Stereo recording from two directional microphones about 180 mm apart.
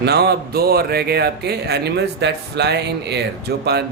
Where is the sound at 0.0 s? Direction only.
65° right (ahead or behind).